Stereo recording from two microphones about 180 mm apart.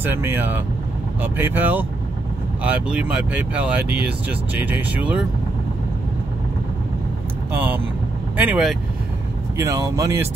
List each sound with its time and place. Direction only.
0.0 s speech: 10° right (ahead or behind)
7.5 s speech: 10° right (ahead or behind)
9.6 s speech: 15° right (ahead or behind)